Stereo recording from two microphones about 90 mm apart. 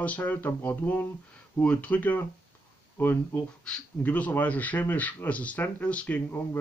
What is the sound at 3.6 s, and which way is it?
Speech, 15° left (ahead or behind).